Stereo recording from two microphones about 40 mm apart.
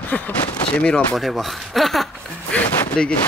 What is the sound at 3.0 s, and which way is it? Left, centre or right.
Speech, centre.